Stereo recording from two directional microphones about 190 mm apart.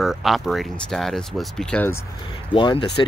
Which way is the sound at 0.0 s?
Centre (ahead or behind).